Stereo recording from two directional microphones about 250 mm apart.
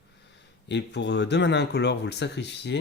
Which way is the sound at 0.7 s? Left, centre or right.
Left.